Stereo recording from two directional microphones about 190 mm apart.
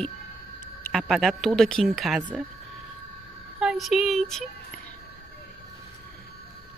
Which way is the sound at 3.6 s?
Centre (ahead or behind).